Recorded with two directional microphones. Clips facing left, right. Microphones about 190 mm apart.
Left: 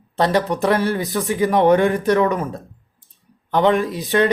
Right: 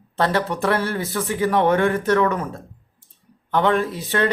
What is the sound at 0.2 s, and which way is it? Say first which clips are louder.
Speech: left 3 dB; 15° left (ahead or behind).